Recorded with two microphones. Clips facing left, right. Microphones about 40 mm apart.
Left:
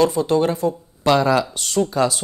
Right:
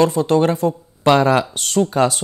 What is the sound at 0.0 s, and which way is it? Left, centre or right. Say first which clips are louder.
Speech: right 2 dB; right.